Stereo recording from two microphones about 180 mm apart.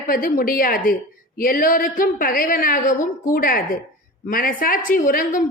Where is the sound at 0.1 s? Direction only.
50° left (ahead or behind).